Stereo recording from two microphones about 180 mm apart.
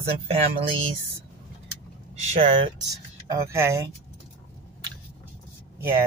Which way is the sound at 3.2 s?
15° right (ahead or behind).